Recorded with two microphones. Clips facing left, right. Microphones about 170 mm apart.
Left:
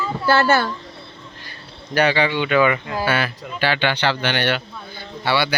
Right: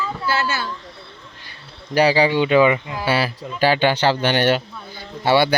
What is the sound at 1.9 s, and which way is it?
Speech, 35° right (ahead or behind).